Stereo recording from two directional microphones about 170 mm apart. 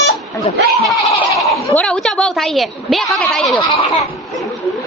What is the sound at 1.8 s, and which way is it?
A woman's voice, centre (ahead or behind).